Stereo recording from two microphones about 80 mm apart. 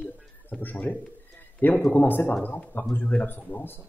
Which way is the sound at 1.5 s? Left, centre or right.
Left.